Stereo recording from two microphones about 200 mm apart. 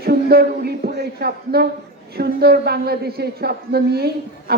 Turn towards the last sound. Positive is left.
turn(degrees=-50)  # may be behind; listen again after turning